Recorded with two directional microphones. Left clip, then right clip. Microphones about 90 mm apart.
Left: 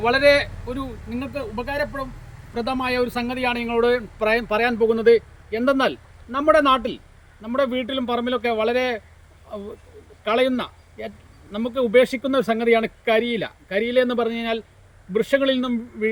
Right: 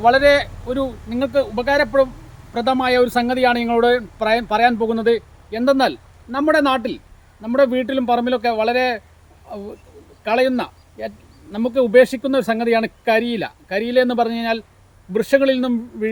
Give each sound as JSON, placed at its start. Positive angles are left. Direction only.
{"t": 0.0, "sound": "speech", "side_deg": -40}
{"t": 0.7, "sound": "speech", "side_deg": -60}
{"t": 10.2, "sound": "speech", "side_deg": -45}